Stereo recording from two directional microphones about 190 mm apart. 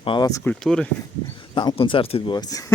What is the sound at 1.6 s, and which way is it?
Speech, 25° left (ahead or behind).